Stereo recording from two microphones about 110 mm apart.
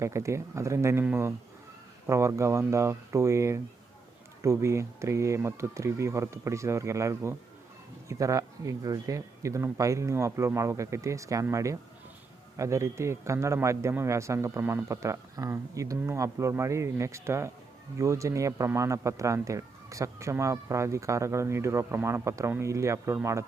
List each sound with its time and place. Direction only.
0.0 s speech: 25° right (ahead or behind)